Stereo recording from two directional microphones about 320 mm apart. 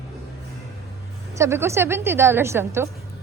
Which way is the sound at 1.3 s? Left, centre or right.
Centre.